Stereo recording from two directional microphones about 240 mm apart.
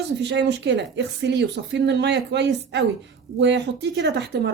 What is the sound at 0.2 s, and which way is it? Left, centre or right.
Speech, right.